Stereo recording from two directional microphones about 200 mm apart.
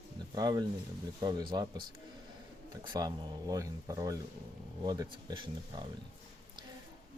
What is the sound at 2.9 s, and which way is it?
Speech, 20° right (ahead or behind).